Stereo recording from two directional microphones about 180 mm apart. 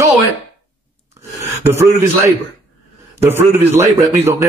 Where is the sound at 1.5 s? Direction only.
15° right (ahead or behind).